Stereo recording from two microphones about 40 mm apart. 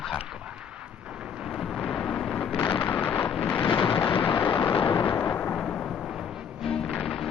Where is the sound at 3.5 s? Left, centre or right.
Left.